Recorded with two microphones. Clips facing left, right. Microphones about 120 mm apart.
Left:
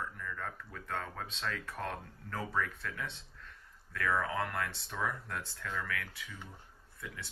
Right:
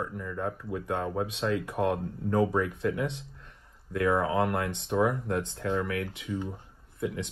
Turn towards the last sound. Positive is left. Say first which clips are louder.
# right 14 dB
turn(degrees=-20)  # may be behind; listen again after turning